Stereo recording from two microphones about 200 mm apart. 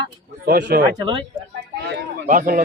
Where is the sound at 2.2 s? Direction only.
40° right (ahead or behind).